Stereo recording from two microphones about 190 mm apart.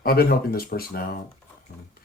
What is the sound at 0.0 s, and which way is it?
Speech, 55° left (ahead or behind).